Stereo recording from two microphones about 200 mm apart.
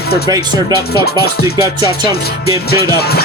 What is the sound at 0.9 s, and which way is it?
Speech, 50° left (ahead or behind).